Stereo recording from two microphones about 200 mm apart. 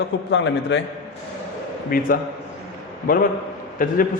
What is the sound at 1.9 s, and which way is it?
Speech, 45° left (ahead or behind).